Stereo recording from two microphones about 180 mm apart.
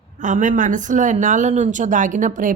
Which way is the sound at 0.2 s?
45° right (ahead or behind).